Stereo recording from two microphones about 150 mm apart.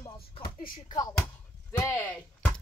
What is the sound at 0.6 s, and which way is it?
Speech, 70° left (ahead or behind).